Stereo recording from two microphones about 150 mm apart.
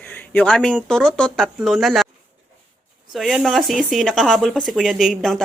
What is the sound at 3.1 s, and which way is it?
A woman's voice, centre (ahead or behind).